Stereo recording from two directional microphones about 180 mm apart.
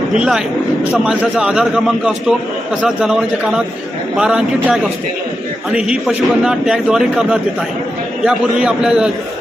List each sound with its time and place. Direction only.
0.2 s a man's voice: 5° right (ahead or behind)